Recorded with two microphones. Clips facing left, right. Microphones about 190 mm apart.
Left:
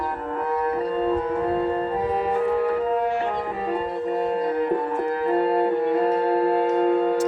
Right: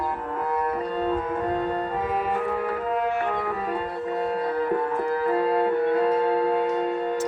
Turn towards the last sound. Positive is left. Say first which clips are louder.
# left 4 dB
turn(degrees=55)  # may be behind; listen again after turning